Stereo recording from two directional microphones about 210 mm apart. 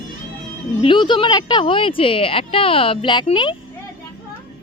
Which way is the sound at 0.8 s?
25° left (ahead or behind).